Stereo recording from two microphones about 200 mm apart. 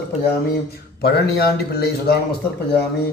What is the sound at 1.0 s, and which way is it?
A man's voice, 55° left (ahead or behind).